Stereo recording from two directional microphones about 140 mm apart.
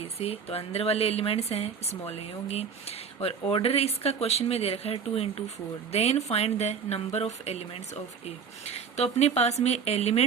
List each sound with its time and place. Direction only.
0.0 s speech: 45° left (ahead or behind)